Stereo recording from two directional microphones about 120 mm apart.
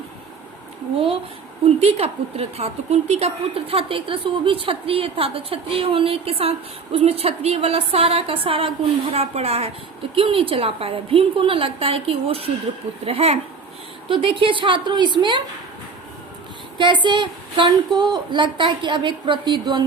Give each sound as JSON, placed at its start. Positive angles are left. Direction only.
{"t": 0.9, "sound": "a woman's voice", "side_deg": -50}
{"t": 1.8, "sound": "a woman's voice", "side_deg": -60}
{"t": 14.1, "sound": "a woman's voice", "side_deg": -45}
{"t": 16.7, "sound": "a woman's voice", "side_deg": -40}